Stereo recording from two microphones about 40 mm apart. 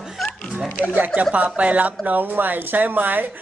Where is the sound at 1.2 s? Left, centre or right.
Right.